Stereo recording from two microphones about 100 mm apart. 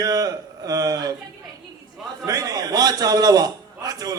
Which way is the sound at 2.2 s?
35° right (ahead or behind).